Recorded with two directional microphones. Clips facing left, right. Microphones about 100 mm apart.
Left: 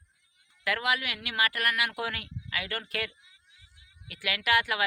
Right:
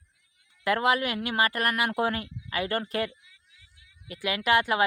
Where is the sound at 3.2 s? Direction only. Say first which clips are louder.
Right 1 dB; 30° left (ahead or behind).